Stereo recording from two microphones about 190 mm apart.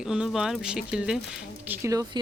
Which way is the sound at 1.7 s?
15° right (ahead or behind).